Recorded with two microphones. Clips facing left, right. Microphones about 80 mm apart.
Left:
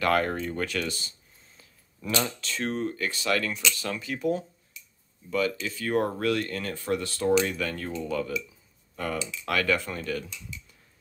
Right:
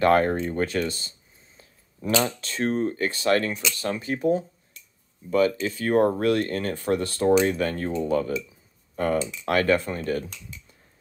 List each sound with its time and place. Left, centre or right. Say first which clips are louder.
0.0 s speech: right 5 dB; right